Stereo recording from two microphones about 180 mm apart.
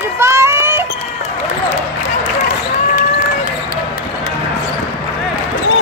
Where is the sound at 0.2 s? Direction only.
15° right (ahead or behind).